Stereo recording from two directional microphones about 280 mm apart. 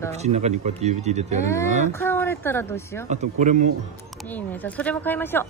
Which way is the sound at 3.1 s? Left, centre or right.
Right.